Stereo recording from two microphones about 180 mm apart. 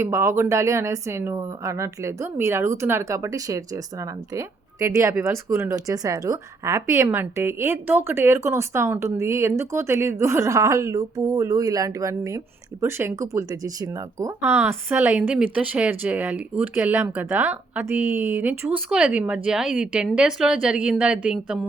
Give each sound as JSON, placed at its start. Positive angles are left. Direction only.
{"t": 0.0, "sound": "a woman's voice", "side_deg": -15}